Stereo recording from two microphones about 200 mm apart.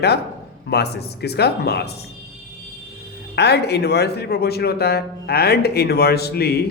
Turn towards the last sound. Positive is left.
turn(degrees=55)  # may be behind; listen again after turning